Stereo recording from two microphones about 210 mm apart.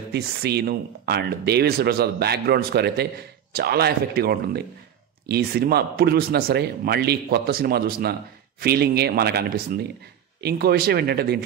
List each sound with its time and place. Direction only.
0.1 s a man's voice: 50° right (ahead or behind)